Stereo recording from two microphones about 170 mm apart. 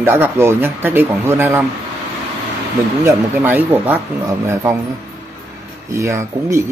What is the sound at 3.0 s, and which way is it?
Speech, 15° right (ahead or behind).